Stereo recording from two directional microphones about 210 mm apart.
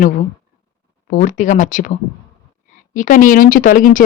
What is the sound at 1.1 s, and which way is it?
Speech, 40° left (ahead or behind).